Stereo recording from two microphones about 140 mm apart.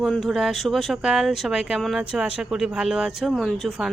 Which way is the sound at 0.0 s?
Centre (ahead or behind).